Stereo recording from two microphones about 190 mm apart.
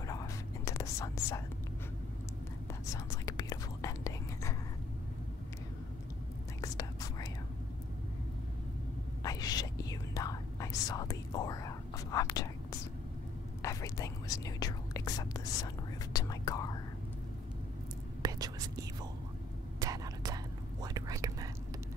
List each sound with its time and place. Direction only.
0.0 s whispering: 15° left (ahead or behind)
2.9 s whispering: 15° left (ahead or behind)
6.6 s whispering: 20° left (ahead or behind)
9.2 s whispering: 20° left (ahead or behind)
18.2 s whispering: 20° right (ahead or behind)